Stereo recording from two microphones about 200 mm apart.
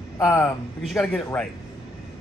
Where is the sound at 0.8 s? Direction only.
5° left (ahead or behind).